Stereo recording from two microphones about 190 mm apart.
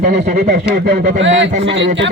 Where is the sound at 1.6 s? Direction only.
65° right (ahead or behind).